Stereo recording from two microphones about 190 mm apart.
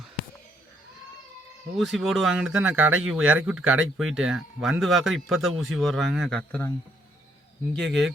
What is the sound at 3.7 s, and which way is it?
Speech, 90° right.